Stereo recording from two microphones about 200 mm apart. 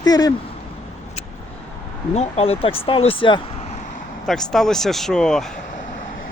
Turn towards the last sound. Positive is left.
turn(degrees=0)  # may be behind; listen again after turning